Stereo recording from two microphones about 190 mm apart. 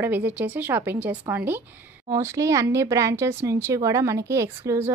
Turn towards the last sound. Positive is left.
turn(degrees=-15)  # may be behind; listen again after turning